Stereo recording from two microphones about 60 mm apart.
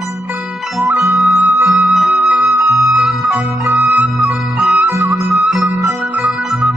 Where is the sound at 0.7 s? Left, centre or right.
Centre.